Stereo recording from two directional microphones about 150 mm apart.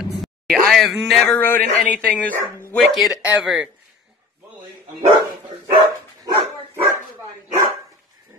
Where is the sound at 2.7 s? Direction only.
Centre (ahead or behind).